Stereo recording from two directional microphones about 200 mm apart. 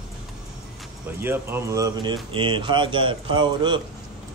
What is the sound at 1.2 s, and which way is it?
Speech, 10° right (ahead or behind).